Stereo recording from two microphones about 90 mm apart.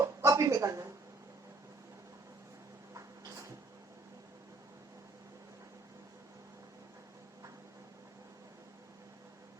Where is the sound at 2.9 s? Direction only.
35° right (ahead or behind).